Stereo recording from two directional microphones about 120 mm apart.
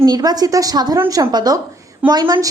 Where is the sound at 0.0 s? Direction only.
30° right (ahead or behind).